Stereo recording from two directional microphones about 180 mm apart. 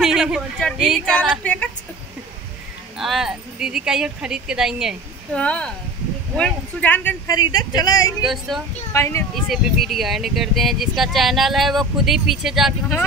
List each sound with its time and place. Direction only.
0.0 s speech: 5° right (ahead or behind)
3.0 s speech: centre (ahead or behind)
7.3 s speech: 20° left (ahead or behind)
8.3 s speech: centre (ahead or behind)
8.9 s speech: 15° left (ahead or behind)
9.3 s speech: centre (ahead or behind)